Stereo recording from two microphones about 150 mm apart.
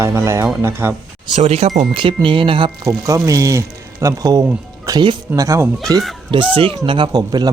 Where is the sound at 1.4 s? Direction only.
45° right (ahead or behind).